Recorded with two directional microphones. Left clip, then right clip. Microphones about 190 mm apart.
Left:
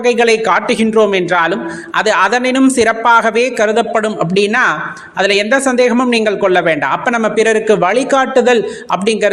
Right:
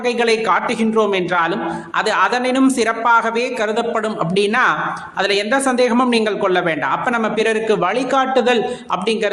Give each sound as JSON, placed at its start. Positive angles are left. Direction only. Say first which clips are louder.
{"t": 0.0, "sound": "a man's voice", "louder": "left 6 dB", "side_deg": 30}